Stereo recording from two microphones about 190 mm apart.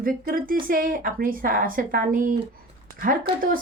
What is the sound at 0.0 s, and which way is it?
Speech, 50° right (ahead or behind).